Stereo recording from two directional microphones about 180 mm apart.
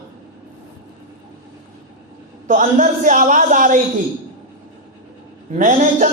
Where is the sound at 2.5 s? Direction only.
45° right (ahead or behind).